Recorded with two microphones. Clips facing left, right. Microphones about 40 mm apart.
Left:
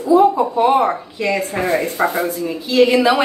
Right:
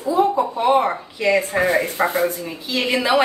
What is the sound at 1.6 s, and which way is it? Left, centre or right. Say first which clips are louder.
Speech: left 1 dB; centre.